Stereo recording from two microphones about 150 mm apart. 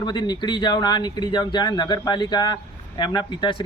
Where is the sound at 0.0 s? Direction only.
30° left (ahead or behind).